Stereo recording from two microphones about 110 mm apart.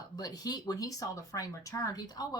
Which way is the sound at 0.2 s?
35° left (ahead or behind).